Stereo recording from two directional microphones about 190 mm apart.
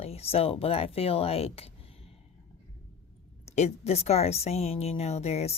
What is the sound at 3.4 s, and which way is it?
Speech, 35° left (ahead or behind).